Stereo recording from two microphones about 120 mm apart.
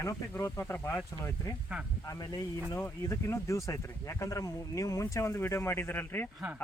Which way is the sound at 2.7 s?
20° left (ahead or behind).